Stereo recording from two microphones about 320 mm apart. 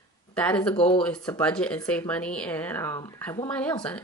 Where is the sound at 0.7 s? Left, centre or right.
Centre.